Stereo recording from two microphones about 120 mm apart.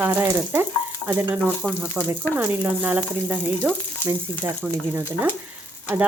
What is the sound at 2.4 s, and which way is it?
Speech, 15° right (ahead or behind).